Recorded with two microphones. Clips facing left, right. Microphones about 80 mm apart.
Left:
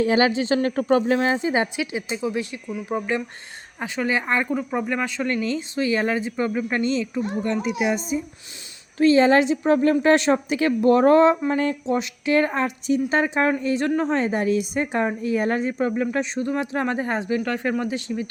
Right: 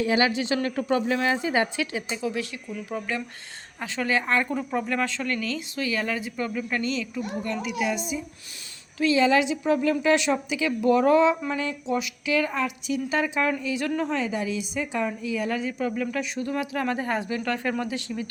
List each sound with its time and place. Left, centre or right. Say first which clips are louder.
0.0 s a woman's voice: left 4 dB; left
13.9 s speech: left 5 dB; left
14.2 s speech: left 6 dB; left